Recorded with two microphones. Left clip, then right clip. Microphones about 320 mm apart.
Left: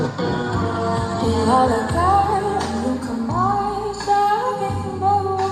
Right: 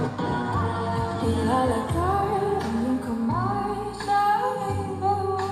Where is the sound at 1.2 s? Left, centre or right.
Left.